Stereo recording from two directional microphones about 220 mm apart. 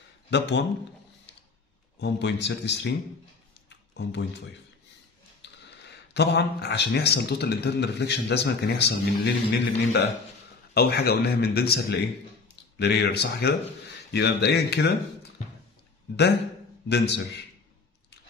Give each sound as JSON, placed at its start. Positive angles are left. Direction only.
{"t": 0.3, "sound": "speech", "side_deg": 55}
{"t": 2.0, "sound": "speech", "side_deg": 50}
{"t": 3.6, "sound": "a sound", "side_deg": 50}
{"t": 5.4, "sound": "speech", "side_deg": 50}
{"t": 16.9, "sound": "speech", "side_deg": 50}